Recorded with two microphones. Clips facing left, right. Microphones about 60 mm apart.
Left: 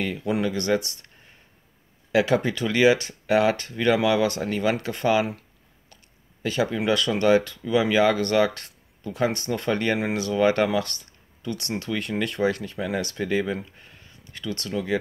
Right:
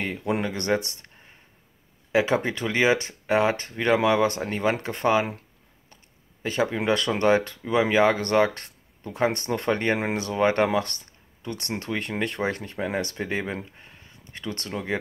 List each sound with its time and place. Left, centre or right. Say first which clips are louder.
0.0 s speech: left 2 dB; right
2.1 s speech: left 1 dB; right
6.4 s speech: left 1 dB; right
13.8 s a sound: even; right